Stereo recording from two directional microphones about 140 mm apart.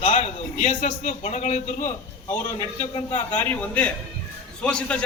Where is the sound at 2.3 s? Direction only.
15° left (ahead or behind).